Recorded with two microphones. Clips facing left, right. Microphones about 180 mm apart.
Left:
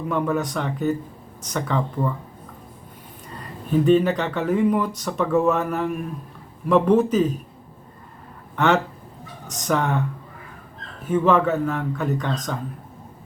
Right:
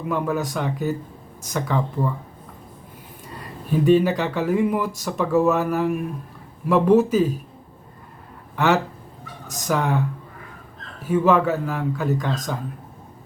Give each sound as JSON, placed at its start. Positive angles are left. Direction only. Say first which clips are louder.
{"t": 0.1, "sound": "speech", "louder": "even", "side_deg": -5}
{"t": 3.8, "sound": "speech", "louder": "right 2 dB", "side_deg": -10}
{"t": 8.5, "sound": "speech", "louder": "even", "side_deg": -5}
{"t": 11.1, "sound": "speech", "louder": "even", "side_deg": -5}